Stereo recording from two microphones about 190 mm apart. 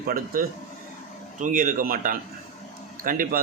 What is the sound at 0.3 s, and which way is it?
Speech, 50° right (ahead or behind).